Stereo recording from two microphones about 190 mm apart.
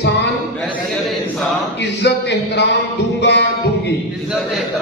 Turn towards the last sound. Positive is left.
turn(degrees=65)  # may be behind; listen again after turning